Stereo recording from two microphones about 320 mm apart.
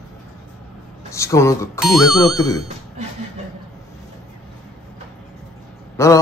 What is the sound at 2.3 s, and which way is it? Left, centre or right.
Speech, centre.